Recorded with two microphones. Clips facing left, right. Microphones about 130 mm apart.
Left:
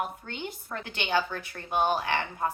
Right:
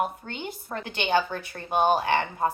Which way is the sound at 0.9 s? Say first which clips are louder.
Right 4 dB; 25° right (ahead or behind).